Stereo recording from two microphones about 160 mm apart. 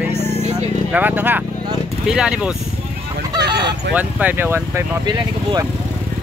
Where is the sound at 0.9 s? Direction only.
10° right (ahead or behind).